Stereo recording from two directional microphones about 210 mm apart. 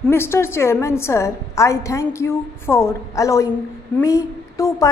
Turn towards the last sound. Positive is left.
turn(degrees=15)  # may be behind; listen again after turning